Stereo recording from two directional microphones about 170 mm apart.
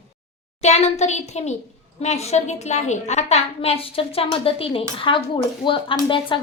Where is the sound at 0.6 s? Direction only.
40° left (ahead or behind).